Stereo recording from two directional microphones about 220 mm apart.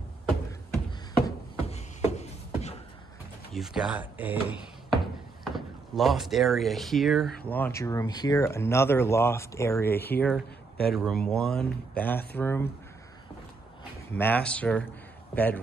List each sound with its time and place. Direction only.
1.7 s beatboxing: 30° left (ahead or behind)
3.5 s speech: centre (ahead or behind)
14.1 s speech: 5° left (ahead or behind)